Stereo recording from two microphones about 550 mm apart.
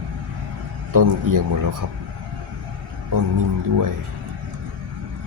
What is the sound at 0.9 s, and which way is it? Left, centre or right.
Speech, right.